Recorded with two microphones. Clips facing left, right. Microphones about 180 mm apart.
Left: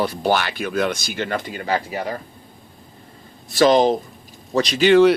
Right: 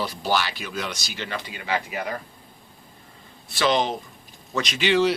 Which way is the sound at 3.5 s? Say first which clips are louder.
Left 8 dB; 40° left (ahead or behind).